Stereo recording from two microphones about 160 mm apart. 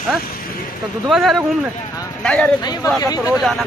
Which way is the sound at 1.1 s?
Centre (ahead or behind).